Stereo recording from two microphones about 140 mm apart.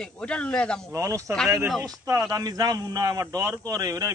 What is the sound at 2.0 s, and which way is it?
A man's voice, 20° right (ahead or behind).